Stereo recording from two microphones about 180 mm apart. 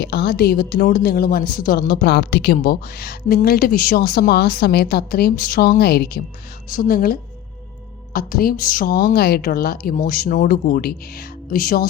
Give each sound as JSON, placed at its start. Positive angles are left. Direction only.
{"t": 0.0, "sound": "a woman's voice", "side_deg": 65}
{"t": 6.7, "sound": "speech", "side_deg": 50}
{"t": 8.3, "sound": "speech", "side_deg": 55}